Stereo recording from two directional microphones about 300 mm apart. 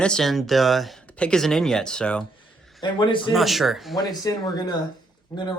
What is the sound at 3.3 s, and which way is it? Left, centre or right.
Speech, centre.